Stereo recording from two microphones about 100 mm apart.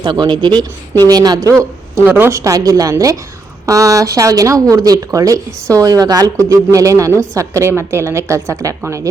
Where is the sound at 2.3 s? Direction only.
35° right (ahead or behind).